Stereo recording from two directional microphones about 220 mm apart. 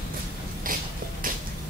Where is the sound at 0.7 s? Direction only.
40° right (ahead or behind).